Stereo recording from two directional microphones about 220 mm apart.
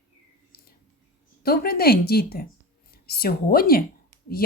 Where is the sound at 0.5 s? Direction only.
45° left (ahead or behind).